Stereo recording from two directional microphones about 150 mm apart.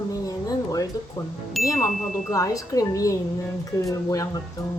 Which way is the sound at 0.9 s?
25° left (ahead or behind).